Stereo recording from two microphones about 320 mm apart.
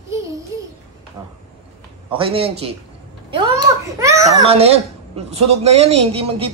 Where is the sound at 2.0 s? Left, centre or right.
Centre.